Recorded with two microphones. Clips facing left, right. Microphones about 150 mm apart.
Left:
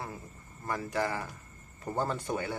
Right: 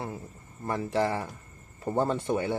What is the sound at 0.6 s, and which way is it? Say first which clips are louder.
Speech: right 5 dB; 25° right (ahead or behind).